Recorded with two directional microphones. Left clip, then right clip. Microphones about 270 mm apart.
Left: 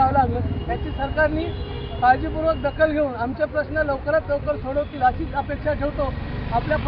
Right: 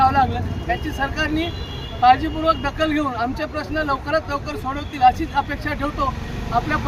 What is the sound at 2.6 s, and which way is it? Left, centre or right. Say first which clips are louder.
Speech: left 1 dB; right.